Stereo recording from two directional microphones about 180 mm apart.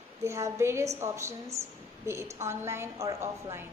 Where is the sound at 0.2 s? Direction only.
15° right (ahead or behind).